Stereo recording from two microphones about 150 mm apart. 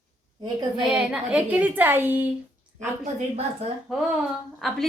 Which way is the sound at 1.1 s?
10° right (ahead or behind).